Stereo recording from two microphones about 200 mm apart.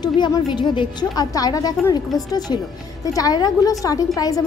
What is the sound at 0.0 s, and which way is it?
A woman's voice, 20° left (ahead or behind).